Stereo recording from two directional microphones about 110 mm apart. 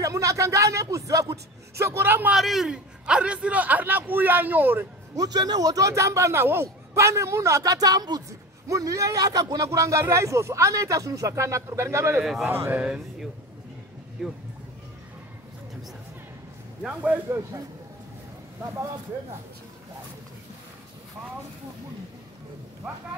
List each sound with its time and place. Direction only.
0.0 s a man's voice: 30° right (ahead or behind)
2.3 s a man's voice: 5° right (ahead or behind)
5.1 s a man's voice: 35° right (ahead or behind)
12.2 s a man's voice: centre (ahead or behind)
16.8 s a man's voice: 10° right (ahead or behind)
17.3 s a man's voice: 25° right (ahead or behind)